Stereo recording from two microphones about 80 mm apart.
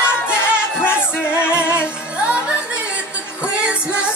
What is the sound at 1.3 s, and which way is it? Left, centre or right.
Music, left.